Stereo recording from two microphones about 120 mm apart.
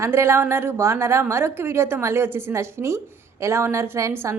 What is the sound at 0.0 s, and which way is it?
A woman's voice, 20° right (ahead or behind).